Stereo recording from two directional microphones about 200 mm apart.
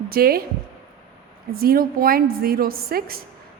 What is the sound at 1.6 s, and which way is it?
A woman's voice, 50° right (ahead or behind).